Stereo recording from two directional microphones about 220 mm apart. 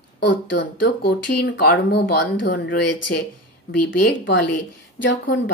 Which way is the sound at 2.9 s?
90° left.